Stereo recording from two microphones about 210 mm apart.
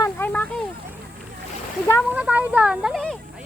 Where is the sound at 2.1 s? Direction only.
5° right (ahead or behind).